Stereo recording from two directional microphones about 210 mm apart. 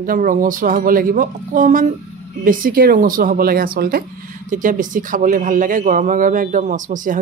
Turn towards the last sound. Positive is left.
turn(degrees=-40)  # may be behind; listen again after turning